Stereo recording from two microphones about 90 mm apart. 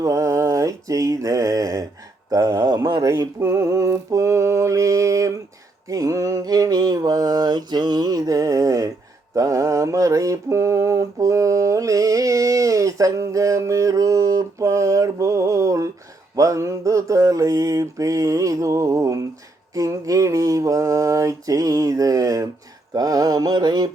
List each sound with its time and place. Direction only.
0.0 s mantra: 35° right (ahead or behind); by 23.9 s 50° right (ahead or behind)